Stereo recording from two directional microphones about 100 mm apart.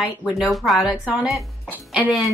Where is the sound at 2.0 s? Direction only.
15° right (ahead or behind).